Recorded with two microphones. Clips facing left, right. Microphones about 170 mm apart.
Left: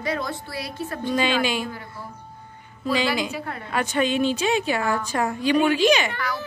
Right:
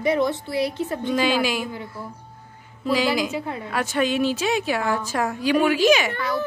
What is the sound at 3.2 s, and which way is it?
Speech, 20° right (ahead or behind).